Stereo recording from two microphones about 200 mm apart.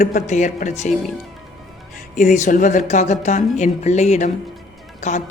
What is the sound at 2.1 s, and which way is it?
Speech, 40° left (ahead or behind).